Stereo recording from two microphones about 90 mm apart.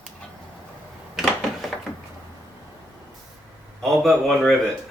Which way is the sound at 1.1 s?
Centre (ahead or behind).